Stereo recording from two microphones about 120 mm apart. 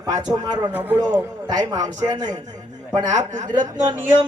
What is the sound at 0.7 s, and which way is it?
Speech, 15° right (ahead or behind).